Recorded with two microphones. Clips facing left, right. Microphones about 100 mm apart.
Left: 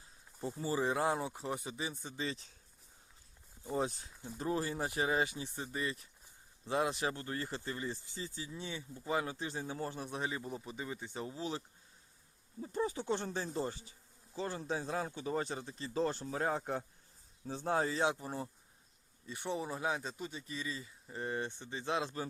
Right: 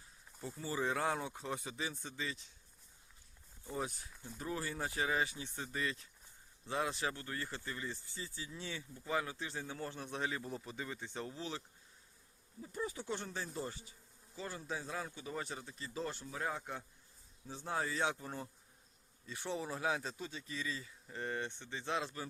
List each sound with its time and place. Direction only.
0.4 s a man's voice: 20° left (ahead or behind)
2.1 s speech: 35° left (ahead or behind)
3.6 s speech: 25° left (ahead or behind)
4.1 s speech: 15° left (ahead or behind)
4.4 s speech: 25° left (ahead or behind)
10.0 s a man's voice: 15° left (ahead or behind)
11.3 s speech: 20° left (ahead or behind)
12.6 s speech: 30° left (ahead or behind)
17.8 s speech: 20° left (ahead or behind)
19.3 s speech: 5° left (ahead or behind)
20.6 s a man's voice: 20° left (ahead or behind)